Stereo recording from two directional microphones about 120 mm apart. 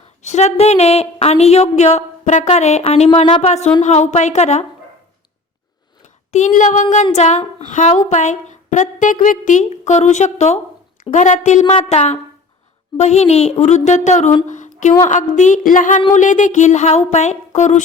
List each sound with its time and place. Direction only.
0.2 s speech: 75° left (ahead or behind)
3.8 s speech: 80° left
6.3 s a woman's voice: 85° left
11.1 s speech: 90° left
11.6 s a woman's voice: 45° left (ahead or behind)
11.9 s speech: 65° left (ahead or behind)
14.5 s a sound: 90° left
15.0 s speech: 90° left